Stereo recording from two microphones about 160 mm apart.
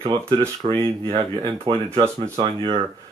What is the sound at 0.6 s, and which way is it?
Speech, 35° right (ahead or behind).